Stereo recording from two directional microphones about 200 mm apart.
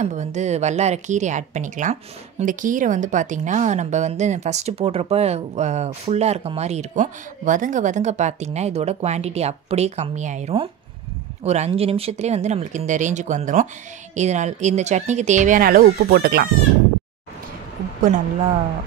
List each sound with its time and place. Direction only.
0.0 s a woman's voice: 35° right (ahead or behind); by 16.4 s 50° right (ahead or behind)